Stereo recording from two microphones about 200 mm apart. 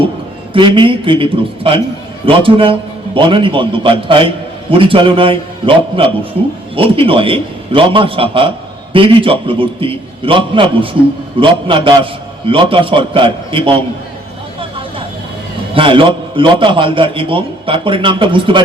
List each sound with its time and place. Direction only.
0.5 s a man's voice: 25° right (ahead or behind)
15.7 s a man's voice: 25° right (ahead or behind)